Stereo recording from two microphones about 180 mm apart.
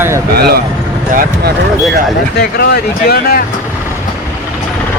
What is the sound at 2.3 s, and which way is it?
Speech, 65° left (ahead or behind).